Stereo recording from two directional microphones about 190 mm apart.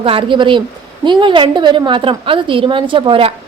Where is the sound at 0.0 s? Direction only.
30° right (ahead or behind).